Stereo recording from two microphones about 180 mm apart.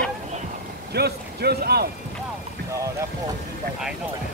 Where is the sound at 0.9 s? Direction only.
65° right (ahead or behind).